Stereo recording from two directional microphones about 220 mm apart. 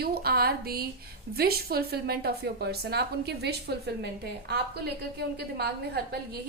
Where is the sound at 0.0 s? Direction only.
45° right (ahead or behind).